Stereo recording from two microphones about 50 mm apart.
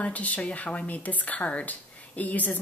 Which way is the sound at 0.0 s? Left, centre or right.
Left.